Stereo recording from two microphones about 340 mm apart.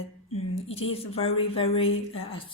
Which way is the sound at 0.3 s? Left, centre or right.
Centre.